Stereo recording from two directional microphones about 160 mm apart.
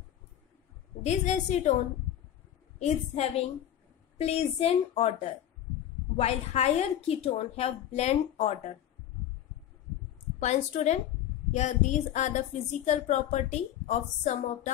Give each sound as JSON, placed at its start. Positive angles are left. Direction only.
{"t": 1.0, "sound": "a woman's voice", "side_deg": 45}
{"t": 2.8, "sound": "a woman's voice", "side_deg": 40}
{"t": 10.4, "sound": "a woman's voice", "side_deg": 45}